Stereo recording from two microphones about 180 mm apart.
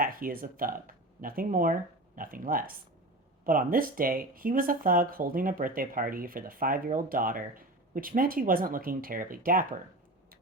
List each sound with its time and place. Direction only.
0.0 s speech: 50° right (ahead or behind)